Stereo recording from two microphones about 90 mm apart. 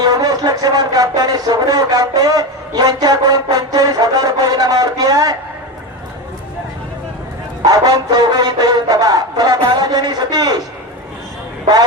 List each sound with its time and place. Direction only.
0.0 s speech: 45° right (ahead or behind)
7.6 s speech: 45° right (ahead or behind)